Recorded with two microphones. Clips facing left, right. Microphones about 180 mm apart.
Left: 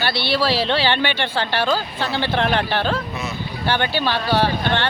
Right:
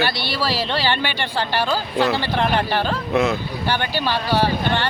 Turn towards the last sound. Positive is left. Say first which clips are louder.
# even
turn(degrees=-10)  # may be behind; listen again after turning